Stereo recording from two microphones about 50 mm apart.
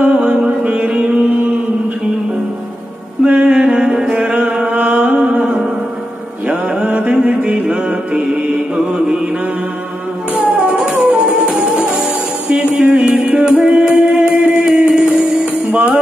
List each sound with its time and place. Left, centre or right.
0.0 s music: right
3.3 s music: centre
6.7 s music: centre
7.7 s mantra: centre
10.6 s music: centre